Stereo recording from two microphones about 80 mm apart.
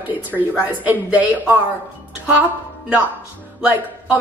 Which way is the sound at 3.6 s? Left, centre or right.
Right.